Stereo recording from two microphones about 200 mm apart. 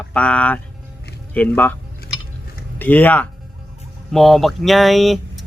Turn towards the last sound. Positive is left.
turn(degrees=0)  # may be behind; listen again after turning